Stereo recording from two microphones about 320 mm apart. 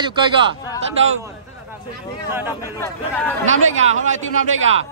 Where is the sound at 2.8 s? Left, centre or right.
Centre.